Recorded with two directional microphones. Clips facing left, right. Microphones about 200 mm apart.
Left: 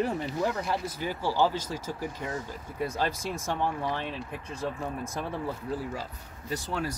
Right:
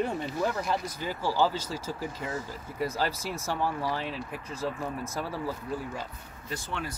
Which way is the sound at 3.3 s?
15° left (ahead or behind).